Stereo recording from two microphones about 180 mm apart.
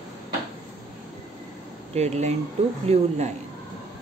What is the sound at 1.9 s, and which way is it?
Speech, 40° right (ahead or behind).